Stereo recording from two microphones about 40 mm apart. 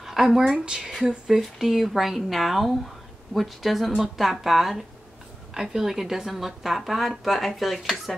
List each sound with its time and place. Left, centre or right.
0.0 s speech: centre
0.7 s speech: centre